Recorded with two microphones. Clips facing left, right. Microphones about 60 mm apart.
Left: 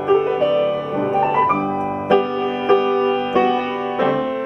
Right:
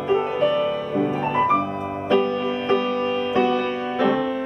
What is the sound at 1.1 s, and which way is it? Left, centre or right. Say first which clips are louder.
Music: left 5 dB; left.